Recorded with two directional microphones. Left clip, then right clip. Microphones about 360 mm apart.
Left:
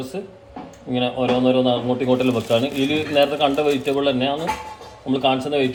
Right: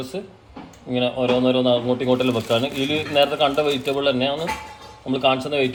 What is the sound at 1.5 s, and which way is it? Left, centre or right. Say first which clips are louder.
Speech: even; right.